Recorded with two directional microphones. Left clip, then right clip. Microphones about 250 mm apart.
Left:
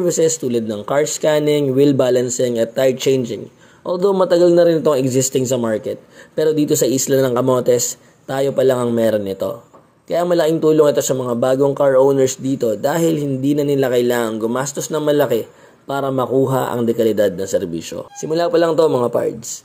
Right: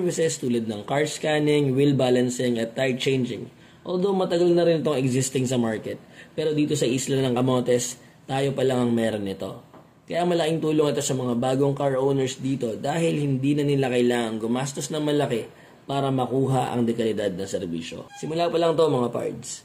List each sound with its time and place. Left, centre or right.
0.1 s a man's voice: centre